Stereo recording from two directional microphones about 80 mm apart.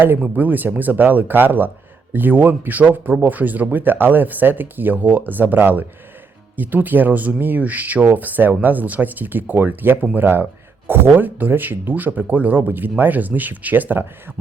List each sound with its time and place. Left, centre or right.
0.3 s speech: right